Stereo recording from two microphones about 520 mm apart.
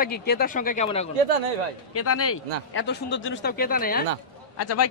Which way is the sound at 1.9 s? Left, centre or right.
Left.